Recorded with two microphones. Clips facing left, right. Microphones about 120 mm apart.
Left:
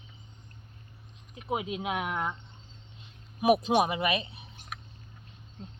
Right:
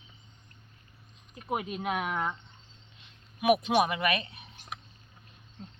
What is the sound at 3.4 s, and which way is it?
Speech, 35° left (ahead or behind).